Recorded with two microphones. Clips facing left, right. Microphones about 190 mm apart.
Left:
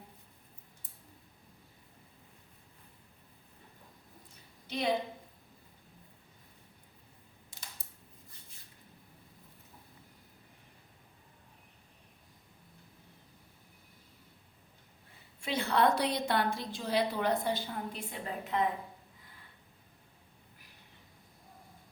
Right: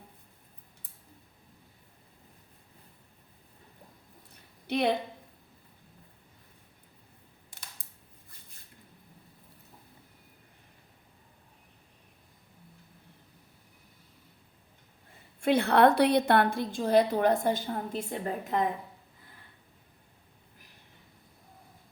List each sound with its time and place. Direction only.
4.6 s a woman's voice: 60° right (ahead or behind)
7.8 s scissors: 60° right (ahead or behind)
15.4 s a woman's voice: 60° right (ahead or behind)